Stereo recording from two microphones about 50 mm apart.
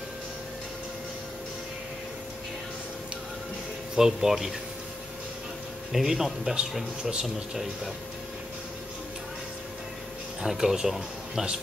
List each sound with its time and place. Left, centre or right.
3.9 s speech: centre
5.9 s speech: centre
10.4 s speech: centre